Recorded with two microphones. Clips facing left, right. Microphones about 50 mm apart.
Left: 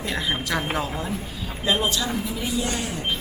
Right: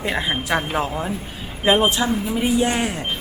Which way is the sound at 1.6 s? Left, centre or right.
Right.